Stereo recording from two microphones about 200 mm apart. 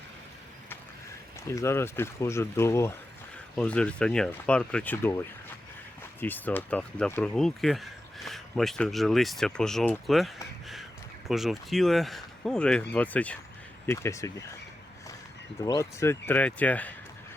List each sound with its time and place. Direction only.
1.5 s speech: 15° left (ahead or behind)
15.6 s speech: 15° left (ahead or behind)